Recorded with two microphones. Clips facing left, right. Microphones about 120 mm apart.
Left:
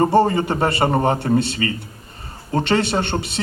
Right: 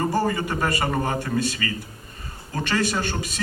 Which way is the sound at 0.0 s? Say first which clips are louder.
Left 7 dB; 30° left (ahead or behind).